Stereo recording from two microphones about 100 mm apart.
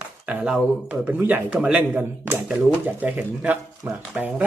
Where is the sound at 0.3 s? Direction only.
10° right (ahead or behind).